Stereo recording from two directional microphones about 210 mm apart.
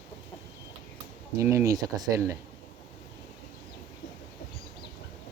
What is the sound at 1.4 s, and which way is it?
Speech, 15° right (ahead or behind).